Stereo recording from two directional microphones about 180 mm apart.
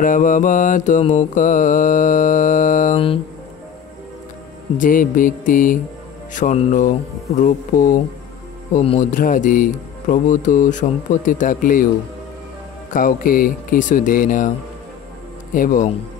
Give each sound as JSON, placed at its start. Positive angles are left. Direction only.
{"t": 0.0, "sound": "mantra", "side_deg": 45}
{"t": 4.7, "sound": "mantra", "side_deg": 50}
{"t": 8.7, "sound": "speech", "side_deg": 35}
{"t": 9.1, "sound": "mantra", "side_deg": 50}
{"t": 12.9, "sound": "mantra", "side_deg": 50}
{"t": 15.5, "sound": "mantra", "side_deg": 50}